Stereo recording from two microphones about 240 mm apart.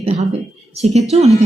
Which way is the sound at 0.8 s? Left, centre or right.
Right.